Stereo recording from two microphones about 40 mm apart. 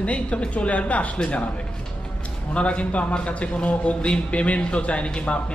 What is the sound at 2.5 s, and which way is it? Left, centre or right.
A man's voice, left.